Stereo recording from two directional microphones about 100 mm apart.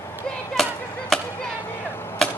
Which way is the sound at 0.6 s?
5° left (ahead or behind).